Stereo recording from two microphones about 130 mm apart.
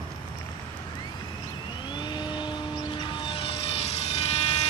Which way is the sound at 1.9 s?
35° left (ahead or behind).